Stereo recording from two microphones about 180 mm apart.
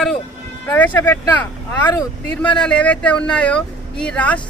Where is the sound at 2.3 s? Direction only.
5° left (ahead or behind).